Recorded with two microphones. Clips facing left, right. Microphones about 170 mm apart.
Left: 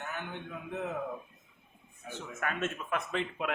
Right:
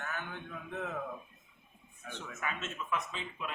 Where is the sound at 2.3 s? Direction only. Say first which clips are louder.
Left 6 dB; 55° left (ahead or behind); by 3.5 s 70° left (ahead or behind).